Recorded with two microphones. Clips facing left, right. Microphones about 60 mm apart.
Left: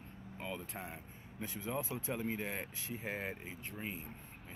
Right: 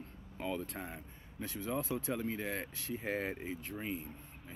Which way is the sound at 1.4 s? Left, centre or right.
Left.